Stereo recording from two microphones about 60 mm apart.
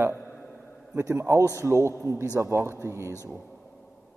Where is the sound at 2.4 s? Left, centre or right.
Right.